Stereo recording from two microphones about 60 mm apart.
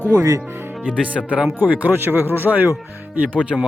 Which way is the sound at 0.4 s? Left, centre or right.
Right.